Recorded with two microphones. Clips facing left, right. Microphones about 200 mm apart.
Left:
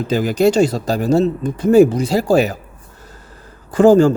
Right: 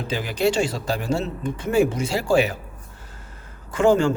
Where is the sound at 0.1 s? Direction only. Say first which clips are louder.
Left 8 dB; 40° left (ahead or behind).